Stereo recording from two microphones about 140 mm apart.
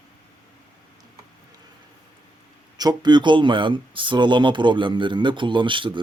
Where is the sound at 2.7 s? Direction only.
30° right (ahead or behind).